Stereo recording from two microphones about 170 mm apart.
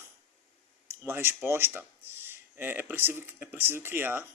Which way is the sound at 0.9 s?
15° right (ahead or behind).